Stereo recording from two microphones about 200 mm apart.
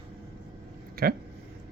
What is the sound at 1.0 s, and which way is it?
Speech, 50° right (ahead or behind).